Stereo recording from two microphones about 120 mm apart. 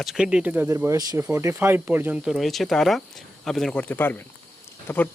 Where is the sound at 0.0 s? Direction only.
5° right (ahead or behind).